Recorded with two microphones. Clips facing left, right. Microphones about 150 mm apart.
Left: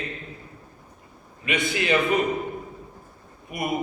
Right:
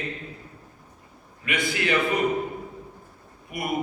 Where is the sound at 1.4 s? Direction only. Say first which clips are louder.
Left 1 dB; 20° left (ahead or behind).